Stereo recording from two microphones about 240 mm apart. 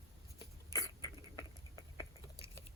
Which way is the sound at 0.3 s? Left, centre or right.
Centre.